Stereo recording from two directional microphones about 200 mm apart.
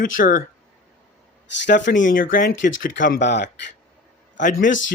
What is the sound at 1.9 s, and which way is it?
Speech, 40° left (ahead or behind).